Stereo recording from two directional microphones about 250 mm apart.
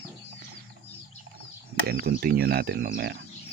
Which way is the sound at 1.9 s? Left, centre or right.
Right.